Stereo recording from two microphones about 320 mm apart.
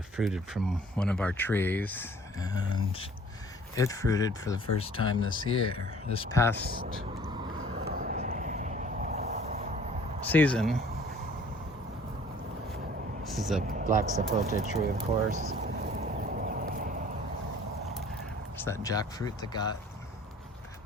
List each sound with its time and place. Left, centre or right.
0.2 s speech: centre
6.8 s speech: centre
7.6 s vehicle: right
10.2 s speech: centre
13.2 s a sound: centre
13.6 s speech: right
15.3 s a sound: right
18.5 s speech: centre